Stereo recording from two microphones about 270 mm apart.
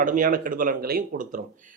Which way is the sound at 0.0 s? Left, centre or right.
Right.